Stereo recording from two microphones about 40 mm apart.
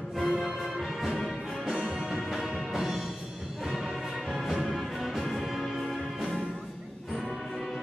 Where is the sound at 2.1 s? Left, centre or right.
Centre.